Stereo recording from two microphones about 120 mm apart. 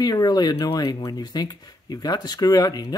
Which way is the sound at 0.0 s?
35° left (ahead or behind).